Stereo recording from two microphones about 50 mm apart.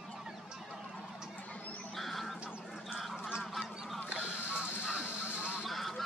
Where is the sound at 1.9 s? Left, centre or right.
Centre.